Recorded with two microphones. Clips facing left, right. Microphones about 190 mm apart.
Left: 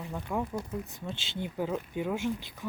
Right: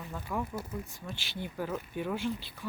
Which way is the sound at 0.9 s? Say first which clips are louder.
Left 3 dB; 20° left (ahead or behind).